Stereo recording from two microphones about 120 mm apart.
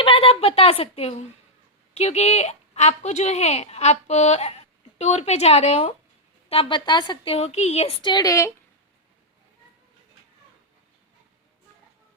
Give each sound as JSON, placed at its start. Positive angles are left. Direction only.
{"t": 0.0, "sound": "a woman's voice", "side_deg": 50}
{"t": 1.9, "sound": "a woman's voice", "side_deg": 65}
{"t": 6.5, "sound": "a woman's voice", "side_deg": 45}
{"t": 7.3, "sound": "a woman's voice", "side_deg": 60}
{"t": 8.0, "sound": "a woman's voice", "side_deg": 30}